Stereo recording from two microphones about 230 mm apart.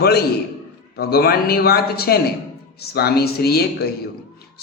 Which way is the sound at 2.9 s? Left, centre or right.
Left.